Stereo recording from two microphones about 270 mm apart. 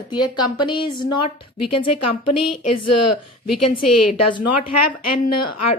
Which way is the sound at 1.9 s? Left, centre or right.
Left.